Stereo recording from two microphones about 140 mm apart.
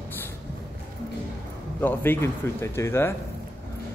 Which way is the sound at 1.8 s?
15° left (ahead or behind).